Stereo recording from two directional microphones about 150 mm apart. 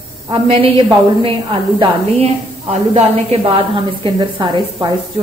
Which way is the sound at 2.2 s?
45° right (ahead or behind).